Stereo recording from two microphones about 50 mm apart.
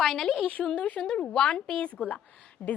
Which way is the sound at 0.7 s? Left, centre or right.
Left.